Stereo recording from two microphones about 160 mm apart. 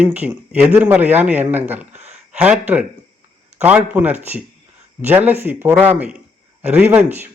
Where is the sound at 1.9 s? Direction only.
45° right (ahead or behind).